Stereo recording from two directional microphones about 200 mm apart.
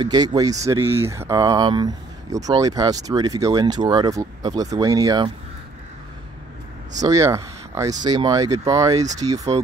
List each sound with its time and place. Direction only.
0.0 s speech: 20° right (ahead or behind)
7.0 s speech: 15° right (ahead or behind)